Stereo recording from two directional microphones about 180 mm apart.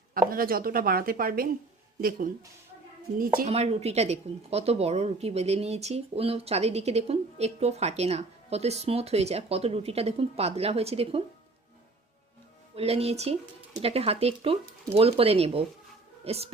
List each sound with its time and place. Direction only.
0.1 s speech: 50° right (ahead or behind)
3.4 s a woman's voice: 35° right (ahead or behind)
12.7 s a woman's voice: 35° right (ahead or behind)